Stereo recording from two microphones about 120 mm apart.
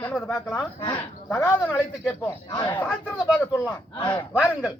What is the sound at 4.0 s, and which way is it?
Speech, 45° left (ahead or behind).